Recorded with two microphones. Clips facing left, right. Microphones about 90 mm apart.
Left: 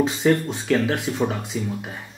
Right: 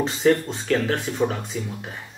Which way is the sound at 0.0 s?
5° left (ahead or behind).